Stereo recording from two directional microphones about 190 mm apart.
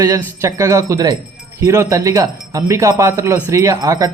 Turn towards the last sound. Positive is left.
turn(degrees=-15)  # may be behind; listen again after turning